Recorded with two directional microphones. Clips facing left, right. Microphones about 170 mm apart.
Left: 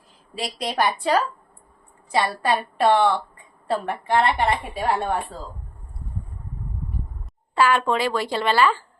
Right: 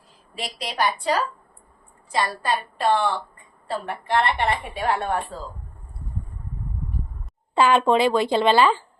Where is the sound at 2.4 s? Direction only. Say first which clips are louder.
Left 3 dB; 65° left (ahead or behind).